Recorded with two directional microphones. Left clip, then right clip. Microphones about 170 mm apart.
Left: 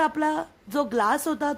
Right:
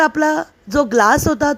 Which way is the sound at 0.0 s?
30° right (ahead or behind).